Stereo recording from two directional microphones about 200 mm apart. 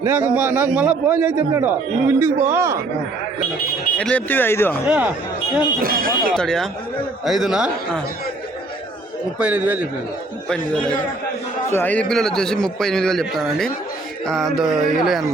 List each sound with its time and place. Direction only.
0.0 s a man's voice: 10° right (ahead or behind)
3.9 s speech: 5° left (ahead or behind)
4.9 s a man's voice: 5° right (ahead or behind)
5.8 s speech: 45° right (ahead or behind)
6.3 s a man's voice: 5° left (ahead or behind)
9.4 s a man's voice: 10° right (ahead or behind)
11.7 s a man's voice: 10° left (ahead or behind)